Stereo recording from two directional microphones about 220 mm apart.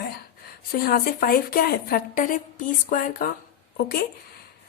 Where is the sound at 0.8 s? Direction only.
40° left (ahead or behind).